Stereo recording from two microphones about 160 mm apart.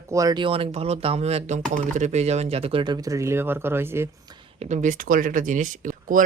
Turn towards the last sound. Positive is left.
turn(degrees=-55)  # may be behind; listen again after turning